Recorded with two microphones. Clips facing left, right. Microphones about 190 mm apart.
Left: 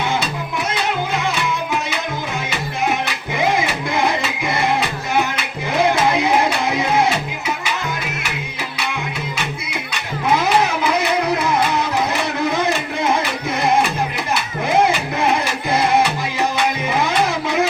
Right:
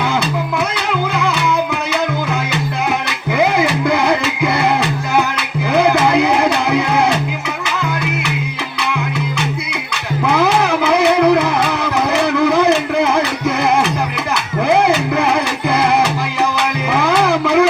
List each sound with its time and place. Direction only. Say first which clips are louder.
3.3 s music: right 5 dB; 65° right (ahead or behind)
5.7 s music: right 4 dB; 65° right (ahead or behind)
10.2 s music: right 2 dB; 65° right (ahead or behind)
15.7 s music: right 1 dB; 65° right (ahead or behind)
16.9 s a sound: right 7 dB; 65° right (ahead or behind)